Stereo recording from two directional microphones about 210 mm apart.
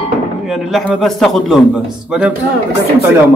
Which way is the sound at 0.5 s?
Centre (ahead or behind).